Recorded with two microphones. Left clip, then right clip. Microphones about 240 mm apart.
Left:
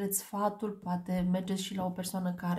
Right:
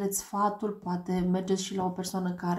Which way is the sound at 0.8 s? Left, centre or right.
Left.